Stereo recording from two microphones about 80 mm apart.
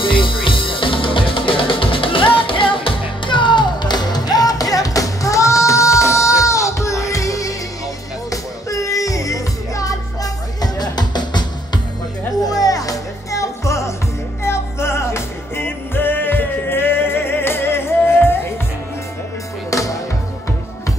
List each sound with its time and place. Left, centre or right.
0.0 s music: left
12.4 s music: left
19.7 s music: left